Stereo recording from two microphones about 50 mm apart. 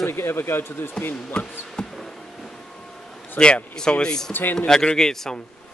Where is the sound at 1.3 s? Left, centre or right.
Centre.